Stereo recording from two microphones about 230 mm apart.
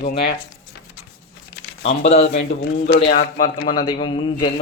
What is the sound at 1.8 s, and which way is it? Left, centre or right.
Speech, left.